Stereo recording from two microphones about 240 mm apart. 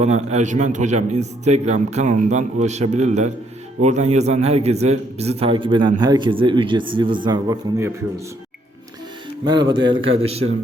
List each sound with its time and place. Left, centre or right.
0.0 s a man's voice: right; by 8.0 s centre
9.4 s a man's voice: centre